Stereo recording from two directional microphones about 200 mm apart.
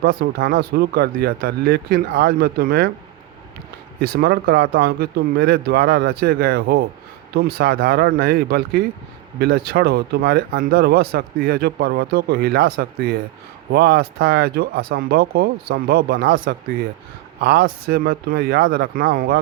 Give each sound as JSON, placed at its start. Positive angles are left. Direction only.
{"t": 0.0, "sound": "speech", "side_deg": -50}
{"t": 4.0, "sound": "speech", "side_deg": -55}
{"t": 16.2, "sound": "speech", "side_deg": -70}
{"t": 17.4, "sound": "speech", "side_deg": -50}